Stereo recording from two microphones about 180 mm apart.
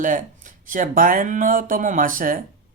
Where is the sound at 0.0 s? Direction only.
45° right (ahead or behind).